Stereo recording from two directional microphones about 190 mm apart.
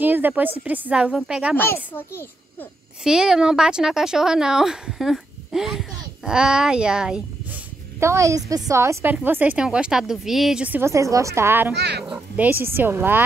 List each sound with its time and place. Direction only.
0.0 s a woman's voice: 10° right (ahead or behind)
1.6 s a child's voice: 10° left (ahead or behind)
3.0 s speech: 5° right (ahead or behind)
8.0 s a woman's voice: 15° right (ahead or behind)
11.7 s a child's voice: 60° right (ahead or behind)
12.1 s a woman's voice: 10° right (ahead or behind)